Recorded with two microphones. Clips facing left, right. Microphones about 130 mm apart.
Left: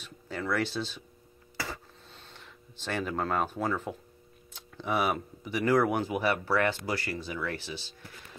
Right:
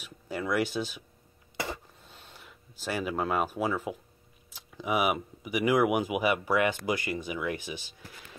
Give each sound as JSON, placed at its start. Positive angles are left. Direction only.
{"t": 0.0, "sound": "speech", "side_deg": -10}
{"t": 1.6, "sound": "throat clearing", "side_deg": -20}
{"t": 2.0, "sound": "a sound", "side_deg": -10}
{"t": 4.5, "sound": "speech", "side_deg": -5}